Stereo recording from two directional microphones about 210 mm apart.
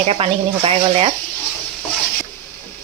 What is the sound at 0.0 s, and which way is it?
Speech, 30° right (ahead or behind).